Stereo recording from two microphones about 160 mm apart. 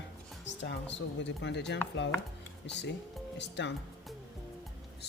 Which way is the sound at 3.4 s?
90° left.